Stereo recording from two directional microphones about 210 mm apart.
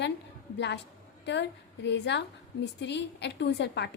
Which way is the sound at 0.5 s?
55° left (ahead or behind).